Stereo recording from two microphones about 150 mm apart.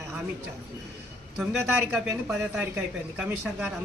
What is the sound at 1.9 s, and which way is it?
Speech, 5° right (ahead or behind).